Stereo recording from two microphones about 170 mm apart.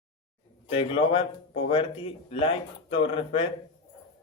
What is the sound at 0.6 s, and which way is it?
A man's voice, 35° left (ahead or behind).